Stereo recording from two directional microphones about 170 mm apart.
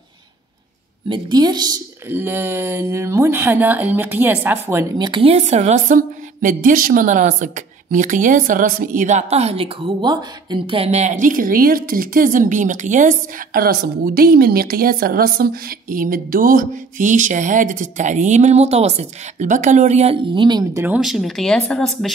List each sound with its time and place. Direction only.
1.0 s a woman's voice: 25° right (ahead or behind)
2.0 s speech: 15° right (ahead or behind)
4.9 s a woman's voice: 25° right (ahead or behind)
20.8 s speech: 5° right (ahead or behind)